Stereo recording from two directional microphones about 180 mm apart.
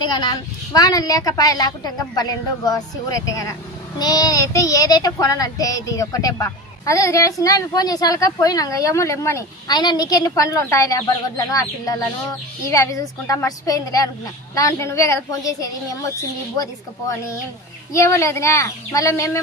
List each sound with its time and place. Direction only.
0.0 s speech: 25° left (ahead or behind)
17.9 s speech: 15° left (ahead or behind)